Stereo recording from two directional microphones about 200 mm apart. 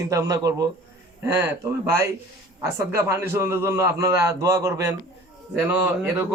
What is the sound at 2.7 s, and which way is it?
Speech, 15° right (ahead or behind).